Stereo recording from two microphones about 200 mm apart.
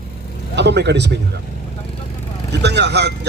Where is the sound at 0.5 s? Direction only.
55° right (ahead or behind).